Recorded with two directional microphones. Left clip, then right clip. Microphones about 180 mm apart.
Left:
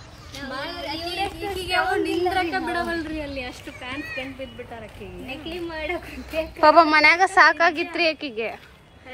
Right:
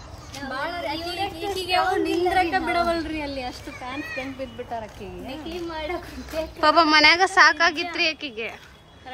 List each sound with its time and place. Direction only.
0.5 s a sound: 5° right (ahead or behind)
4.0 s a child's voice: 35° right (ahead or behind)
5.9 s a woman's voice: centre (ahead or behind)